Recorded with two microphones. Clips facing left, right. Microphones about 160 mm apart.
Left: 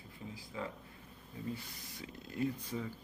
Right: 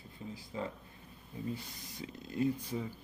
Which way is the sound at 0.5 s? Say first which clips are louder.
Right 3 dB; 35° right (ahead or behind).